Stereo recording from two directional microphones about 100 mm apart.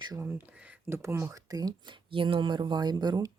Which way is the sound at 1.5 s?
40° right (ahead or behind).